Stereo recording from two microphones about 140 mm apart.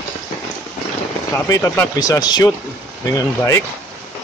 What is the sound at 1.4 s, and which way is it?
Speech, 25° left (ahead or behind).